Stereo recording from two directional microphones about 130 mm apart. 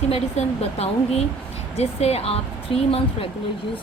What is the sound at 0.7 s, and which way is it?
Speech, 50° left (ahead or behind).